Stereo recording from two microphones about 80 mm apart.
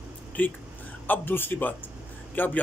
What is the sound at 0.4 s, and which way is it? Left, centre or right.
A man's voice, left.